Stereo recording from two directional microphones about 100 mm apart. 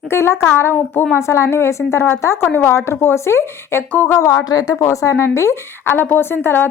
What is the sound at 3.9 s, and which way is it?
Speech, 15° left (ahead or behind).